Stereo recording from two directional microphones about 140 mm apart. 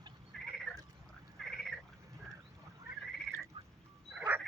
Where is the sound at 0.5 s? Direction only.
Centre (ahead or behind).